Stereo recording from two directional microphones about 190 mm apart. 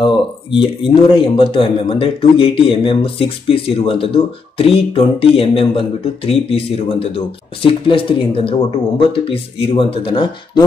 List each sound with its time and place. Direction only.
0.0 s a man's voice: 25° left (ahead or behind)